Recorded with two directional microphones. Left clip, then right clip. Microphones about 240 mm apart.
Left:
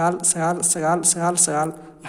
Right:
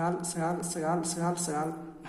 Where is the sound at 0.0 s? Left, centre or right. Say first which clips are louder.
Left 10 dB; left.